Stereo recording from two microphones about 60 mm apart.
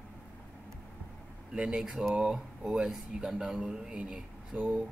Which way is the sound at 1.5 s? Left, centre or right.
Centre.